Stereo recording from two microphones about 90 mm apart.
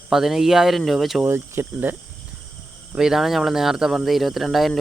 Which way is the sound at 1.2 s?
25° right (ahead or behind).